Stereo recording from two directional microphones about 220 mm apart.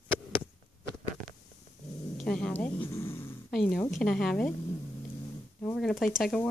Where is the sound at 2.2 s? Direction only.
5° left (ahead or behind).